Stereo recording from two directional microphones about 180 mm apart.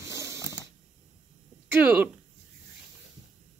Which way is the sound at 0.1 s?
15° right (ahead or behind).